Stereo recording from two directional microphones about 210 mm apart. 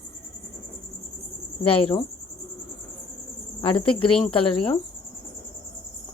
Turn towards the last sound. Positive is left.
turn(degrees=25)  # may be behind; listen again after turning